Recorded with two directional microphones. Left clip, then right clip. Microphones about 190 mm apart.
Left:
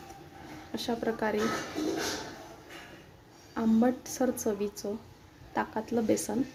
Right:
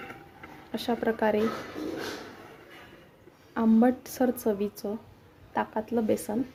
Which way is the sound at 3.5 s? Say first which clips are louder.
Right 4 dB; 25° right (ahead or behind).